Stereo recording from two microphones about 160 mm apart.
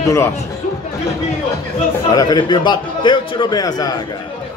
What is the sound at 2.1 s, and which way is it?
A man's voice, 25° left (ahead or behind).